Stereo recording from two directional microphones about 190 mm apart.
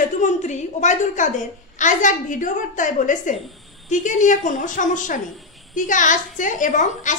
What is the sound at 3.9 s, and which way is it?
Speech, 40° left (ahead or behind).